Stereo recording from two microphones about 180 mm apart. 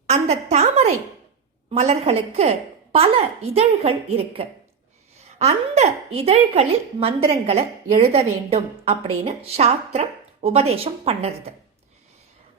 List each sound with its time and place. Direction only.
0.1 s a woman's voice: 40° right (ahead or behind)